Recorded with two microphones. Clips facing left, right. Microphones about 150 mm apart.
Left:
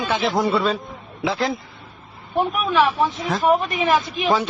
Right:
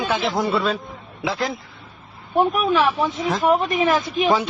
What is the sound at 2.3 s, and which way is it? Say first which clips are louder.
Speech: right 2 dB; 40° right (ahead or behind).